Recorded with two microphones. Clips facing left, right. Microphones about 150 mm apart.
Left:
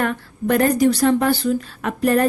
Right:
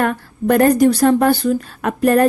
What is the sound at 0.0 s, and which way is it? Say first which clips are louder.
A woman's voice: right 4 dB; 50° right (ahead or behind).